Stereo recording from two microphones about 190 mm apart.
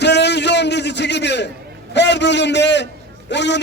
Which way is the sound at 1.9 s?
65° left (ahead or behind).